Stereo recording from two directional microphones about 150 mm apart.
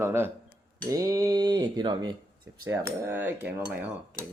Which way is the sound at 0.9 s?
20° right (ahead or behind).